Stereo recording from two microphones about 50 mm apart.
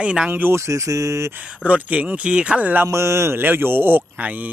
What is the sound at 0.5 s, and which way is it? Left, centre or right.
Speech, right.